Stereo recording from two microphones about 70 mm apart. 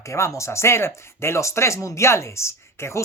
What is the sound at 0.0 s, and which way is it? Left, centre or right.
Speech, left.